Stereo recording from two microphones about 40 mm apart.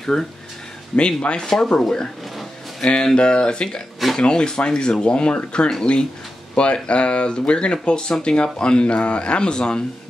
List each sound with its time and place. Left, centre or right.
0.0 s speech: centre
0.9 s speech: left
1.4 s speech: centre
2.8 s speech: centre